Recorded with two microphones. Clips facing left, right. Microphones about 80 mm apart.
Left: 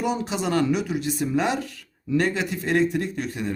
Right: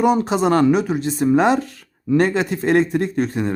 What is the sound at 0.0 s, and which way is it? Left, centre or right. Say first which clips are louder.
Speech: right 9 dB; right.